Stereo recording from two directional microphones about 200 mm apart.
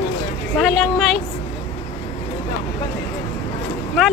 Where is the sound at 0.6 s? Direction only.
Centre (ahead or behind).